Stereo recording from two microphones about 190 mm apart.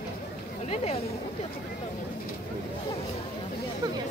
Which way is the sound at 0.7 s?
35° left (ahead or behind).